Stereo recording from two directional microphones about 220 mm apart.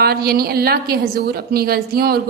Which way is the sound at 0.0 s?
45° right (ahead or behind).